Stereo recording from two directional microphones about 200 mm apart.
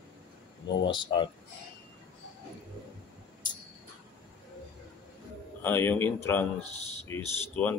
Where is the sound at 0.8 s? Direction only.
20° left (ahead or behind).